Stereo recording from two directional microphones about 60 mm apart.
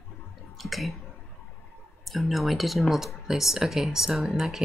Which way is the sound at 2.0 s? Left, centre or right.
Centre.